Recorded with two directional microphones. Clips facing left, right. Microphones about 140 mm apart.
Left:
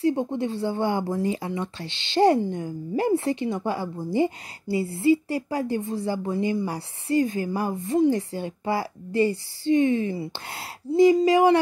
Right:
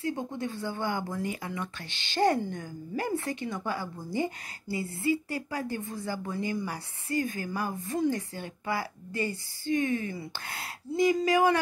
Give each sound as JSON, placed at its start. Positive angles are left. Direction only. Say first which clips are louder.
{"t": 0.0, "sound": "speech", "louder": "left 9 dB", "side_deg": 25}